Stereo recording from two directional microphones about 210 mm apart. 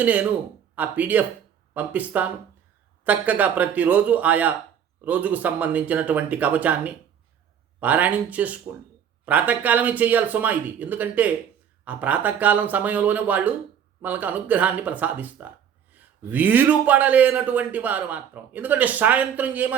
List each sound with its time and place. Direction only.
0.0 s speech: 5° right (ahead or behind)